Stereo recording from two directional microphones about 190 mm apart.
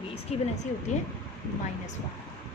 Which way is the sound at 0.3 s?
35° left (ahead or behind).